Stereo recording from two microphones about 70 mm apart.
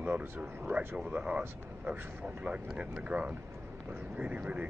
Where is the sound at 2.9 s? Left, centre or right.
Centre.